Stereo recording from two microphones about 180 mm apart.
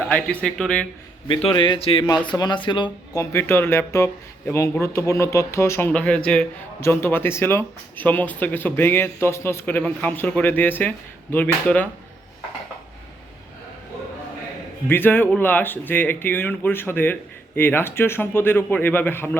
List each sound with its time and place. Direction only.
0.1 s speech: 5° left (ahead or behind)
1.3 s speech: 30° left (ahead or behind)
3.2 s speech: 15° left (ahead or behind)
14.8 s speech: 10° left (ahead or behind)